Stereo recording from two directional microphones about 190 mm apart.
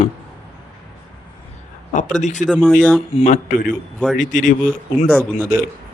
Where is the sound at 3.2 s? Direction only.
40° left (ahead or behind).